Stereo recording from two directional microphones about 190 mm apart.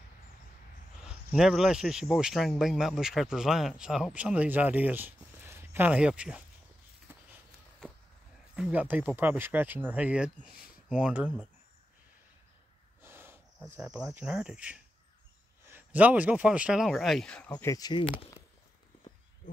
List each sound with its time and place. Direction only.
1.0 s speech: 5° right (ahead or behind)
8.5 s speech: 5° right (ahead or behind)
13.0 s snort: 10° right (ahead or behind)
13.7 s speech: 5° right (ahead or behind); by 18.0 s 20° left (ahead or behind)
19.4 s a sound: 45° left (ahead or behind)